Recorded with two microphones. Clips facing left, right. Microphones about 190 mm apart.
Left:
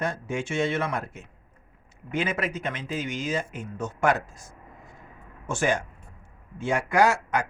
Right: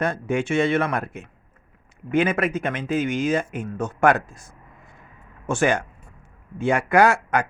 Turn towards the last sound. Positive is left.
turn(degrees=-55)  # may be behind; listen again after turning